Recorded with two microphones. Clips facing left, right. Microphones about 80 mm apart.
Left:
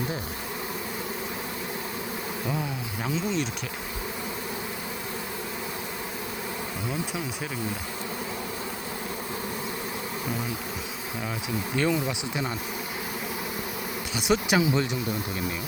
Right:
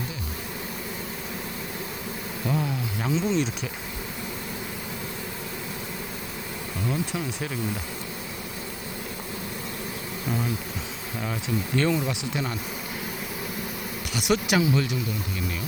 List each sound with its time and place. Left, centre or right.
2.5 s a sound: centre
11.4 s speech: centre
14.1 s speech: centre